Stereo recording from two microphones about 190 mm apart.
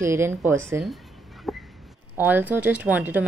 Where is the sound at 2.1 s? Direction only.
10° right (ahead or behind).